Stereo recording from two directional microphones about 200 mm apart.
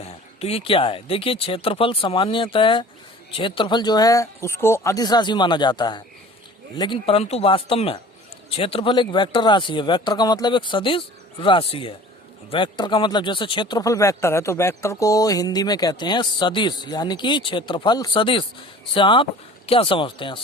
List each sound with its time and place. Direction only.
0.0 s speech: 30° left (ahead or behind)